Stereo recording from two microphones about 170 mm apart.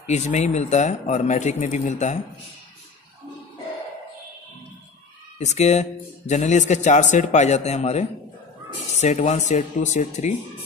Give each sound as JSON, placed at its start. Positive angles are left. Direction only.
{"t": 0.0, "sound": "speech", "side_deg": 40}
{"t": 5.4, "sound": "speech", "side_deg": 40}